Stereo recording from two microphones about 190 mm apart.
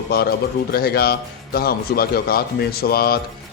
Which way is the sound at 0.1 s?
55° left (ahead or behind).